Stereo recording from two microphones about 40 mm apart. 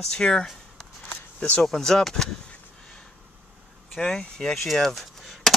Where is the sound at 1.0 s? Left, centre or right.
Left.